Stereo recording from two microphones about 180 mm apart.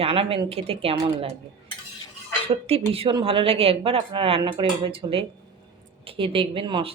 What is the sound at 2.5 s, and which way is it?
Speech, 35° right (ahead or behind).